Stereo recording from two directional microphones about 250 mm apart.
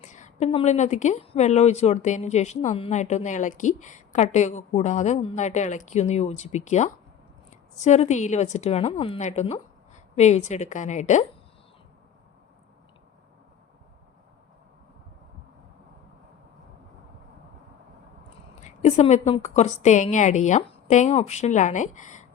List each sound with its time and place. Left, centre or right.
0.0 s a woman's voice: left
18.6 s a woman's voice: left